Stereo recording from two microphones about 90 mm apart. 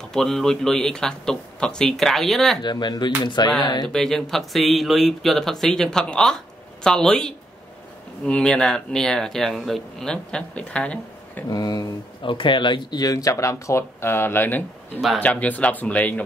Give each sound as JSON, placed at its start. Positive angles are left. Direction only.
{"t": 0.1, "sound": "speech", "side_deg": 5}
{"t": 2.6, "sound": "speech", "side_deg": 50}
{"t": 3.9, "sound": "speech", "side_deg": 5}
{"t": 11.4, "sound": "speech", "side_deg": 45}
{"t": 12.2, "sound": "speech", "side_deg": 65}